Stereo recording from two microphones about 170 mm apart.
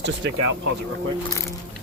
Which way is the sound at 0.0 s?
90° right.